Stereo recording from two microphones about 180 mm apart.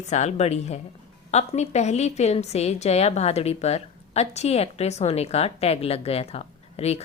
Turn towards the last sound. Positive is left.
turn(degrees=35)  # may be behind; listen again after turning